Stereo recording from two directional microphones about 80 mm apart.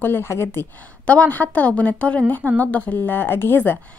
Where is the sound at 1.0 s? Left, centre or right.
Centre.